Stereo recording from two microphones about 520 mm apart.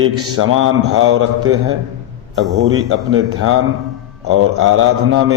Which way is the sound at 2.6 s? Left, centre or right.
Right.